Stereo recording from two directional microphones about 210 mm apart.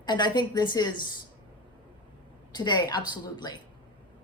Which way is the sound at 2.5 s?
20° left (ahead or behind).